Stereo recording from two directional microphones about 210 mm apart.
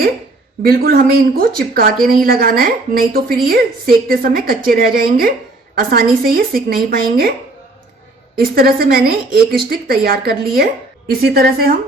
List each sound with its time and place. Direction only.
0.6 s a woman's voice: 45° right (ahead or behind)
8.4 s a woman's voice: 45° right (ahead or behind)